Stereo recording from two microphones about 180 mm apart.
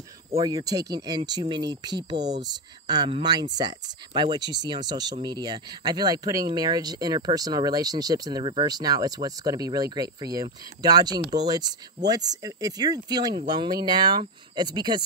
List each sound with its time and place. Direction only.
0.4 s speech: 20° right (ahead or behind)